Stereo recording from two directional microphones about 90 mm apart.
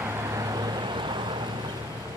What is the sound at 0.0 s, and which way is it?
Vehicle, 30° right (ahead or behind).